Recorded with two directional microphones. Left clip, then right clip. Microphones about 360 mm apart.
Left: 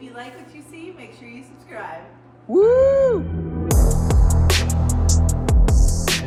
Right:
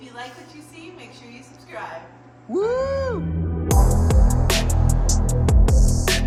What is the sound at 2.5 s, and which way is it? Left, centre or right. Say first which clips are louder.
Cat: left 8 dB; centre.